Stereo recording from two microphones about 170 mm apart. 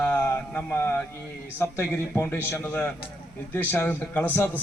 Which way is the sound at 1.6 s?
15° left (ahead or behind).